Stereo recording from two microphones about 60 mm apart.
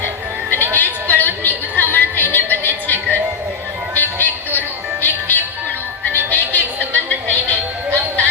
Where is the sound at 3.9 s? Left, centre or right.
Left.